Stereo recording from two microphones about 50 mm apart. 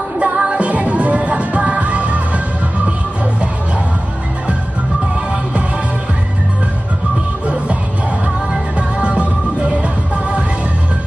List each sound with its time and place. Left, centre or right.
0.2 s music: right
8.7 s music: right